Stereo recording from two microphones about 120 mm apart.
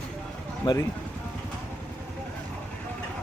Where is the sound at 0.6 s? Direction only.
35° left (ahead or behind).